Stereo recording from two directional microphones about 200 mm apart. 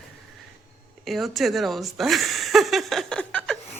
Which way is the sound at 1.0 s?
Centre (ahead or behind).